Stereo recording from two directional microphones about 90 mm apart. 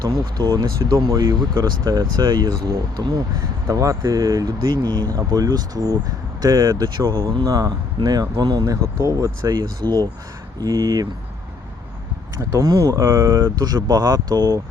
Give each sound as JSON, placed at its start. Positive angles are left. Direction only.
{"t": 0.0, "sound": "speech", "side_deg": -45}
{"t": 4.7, "sound": "speech", "side_deg": -55}
{"t": 9.8, "sound": "speech", "side_deg": -50}
{"t": 12.5, "sound": "speech", "side_deg": -40}
{"t": 13.4, "sound": "speech", "side_deg": -50}